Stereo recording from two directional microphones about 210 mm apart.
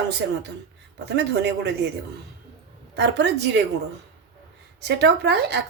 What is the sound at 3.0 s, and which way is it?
Speech, 55° right (ahead or behind).